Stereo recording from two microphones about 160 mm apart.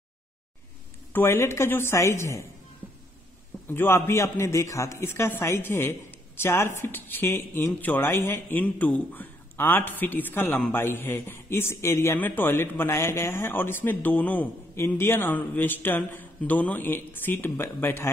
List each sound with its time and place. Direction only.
1.1 s speech: 15° left (ahead or behind)
3.6 s speech: 15° left (ahead or behind)